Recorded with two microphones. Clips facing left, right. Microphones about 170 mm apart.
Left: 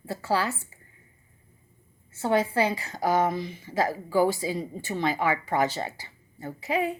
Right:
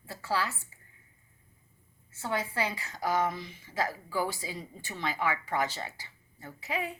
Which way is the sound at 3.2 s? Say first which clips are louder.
Left 6 dB; 40° left (ahead or behind).